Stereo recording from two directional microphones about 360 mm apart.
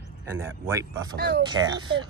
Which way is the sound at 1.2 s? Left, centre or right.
Right.